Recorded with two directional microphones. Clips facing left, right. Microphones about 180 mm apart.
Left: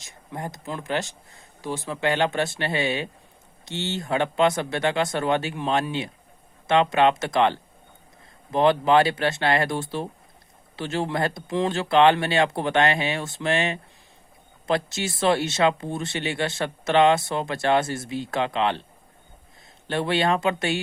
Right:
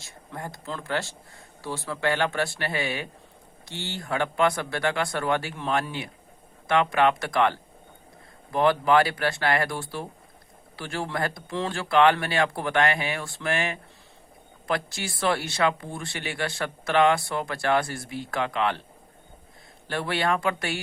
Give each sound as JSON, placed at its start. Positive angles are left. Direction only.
{"t": 0.0, "sound": "speech", "side_deg": 20}
{"t": 19.9, "sound": "speech", "side_deg": 25}